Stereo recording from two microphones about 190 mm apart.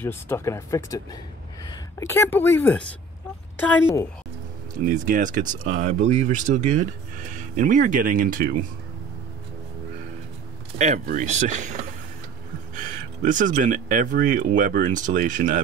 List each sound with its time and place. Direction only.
0.0 s speech: 10° left (ahead or behind)
4.7 s speech: 45° right (ahead or behind)
10.8 s speech: 40° right (ahead or behind)